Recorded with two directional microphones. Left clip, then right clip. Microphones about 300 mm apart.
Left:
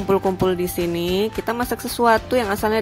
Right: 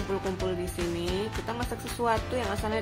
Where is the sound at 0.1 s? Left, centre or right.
Left.